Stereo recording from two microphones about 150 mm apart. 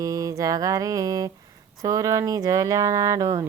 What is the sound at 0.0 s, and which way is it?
Speech, 20° right (ahead or behind).